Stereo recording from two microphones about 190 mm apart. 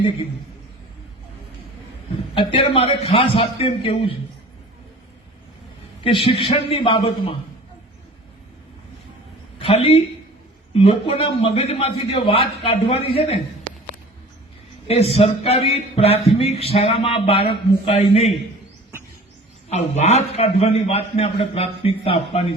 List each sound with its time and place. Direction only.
2.3 s a man's voice: 25° left (ahead or behind)
6.0 s a man's voice: 25° left (ahead or behind)
9.6 s a man's voice: 30° left (ahead or behind)
14.8 s speech: 30° left (ahead or behind)
19.6 s speech: 35° left (ahead or behind)